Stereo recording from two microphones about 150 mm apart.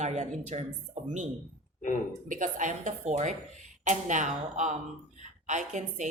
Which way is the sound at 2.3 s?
60° right (ahead or behind).